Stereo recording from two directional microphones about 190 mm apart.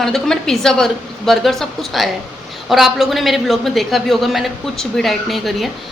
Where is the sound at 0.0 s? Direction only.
Centre (ahead or behind).